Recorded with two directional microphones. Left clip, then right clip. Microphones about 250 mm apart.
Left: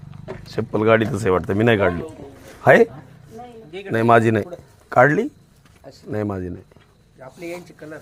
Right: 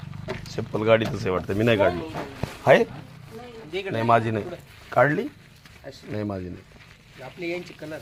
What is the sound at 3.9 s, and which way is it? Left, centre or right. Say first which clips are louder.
A man's voice: left 6 dB; left.